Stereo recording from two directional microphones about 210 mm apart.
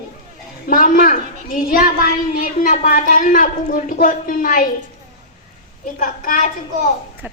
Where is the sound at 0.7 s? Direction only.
40° left (ahead or behind).